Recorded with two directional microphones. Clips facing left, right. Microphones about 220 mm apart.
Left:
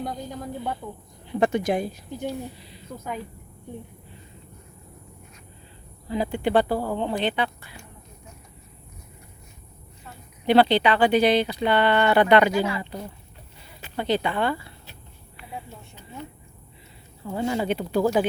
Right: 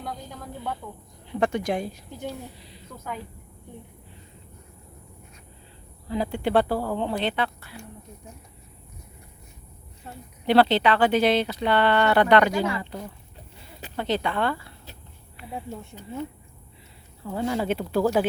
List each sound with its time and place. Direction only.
0.0 s a woman's voice: 20° left (ahead or behind)
1.4 s a woman's voice: 5° left (ahead or behind)
6.1 s speech: 5° left (ahead or behind)
10.4 s speech: centre (ahead or behind)
15.8 s speech: 45° right (ahead or behind)
17.2 s speech: centre (ahead or behind)